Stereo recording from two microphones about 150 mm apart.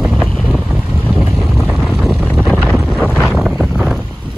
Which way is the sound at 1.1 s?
5° right (ahead or behind).